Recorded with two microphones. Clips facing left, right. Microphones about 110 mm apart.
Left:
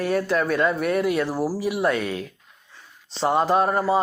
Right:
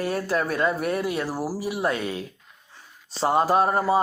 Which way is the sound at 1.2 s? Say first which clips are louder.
Left 4 dB; 5° right (ahead or behind).